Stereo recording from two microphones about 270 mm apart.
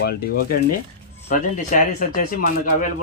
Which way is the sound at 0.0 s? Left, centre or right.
Left.